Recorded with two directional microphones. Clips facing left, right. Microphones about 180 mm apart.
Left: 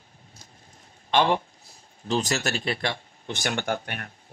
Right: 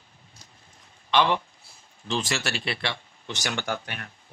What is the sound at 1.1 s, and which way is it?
Speech, 45° left (ahead or behind).